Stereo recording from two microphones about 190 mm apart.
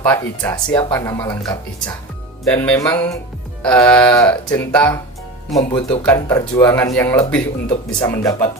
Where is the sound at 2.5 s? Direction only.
10° left (ahead or behind).